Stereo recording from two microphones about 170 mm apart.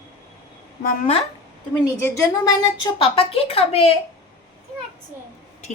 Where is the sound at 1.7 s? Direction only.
15° left (ahead or behind).